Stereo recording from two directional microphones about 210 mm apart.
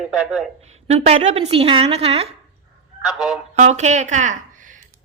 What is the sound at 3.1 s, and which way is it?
Speech, centre (ahead or behind).